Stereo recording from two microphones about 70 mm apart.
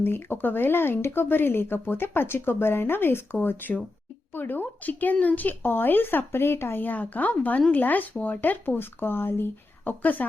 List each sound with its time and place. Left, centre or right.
0.0 s speech: left